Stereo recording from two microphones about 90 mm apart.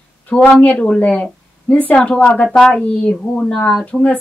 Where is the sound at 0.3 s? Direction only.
15° left (ahead or behind).